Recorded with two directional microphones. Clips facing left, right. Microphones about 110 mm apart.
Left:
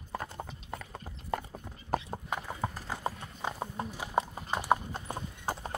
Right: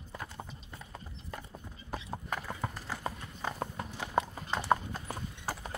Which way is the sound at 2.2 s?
15° left (ahead or behind).